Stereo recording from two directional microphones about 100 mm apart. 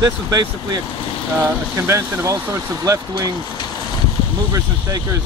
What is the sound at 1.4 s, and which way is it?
Speech, 30° right (ahead or behind).